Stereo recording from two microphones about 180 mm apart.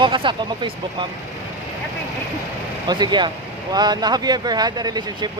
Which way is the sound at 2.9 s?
25° right (ahead or behind).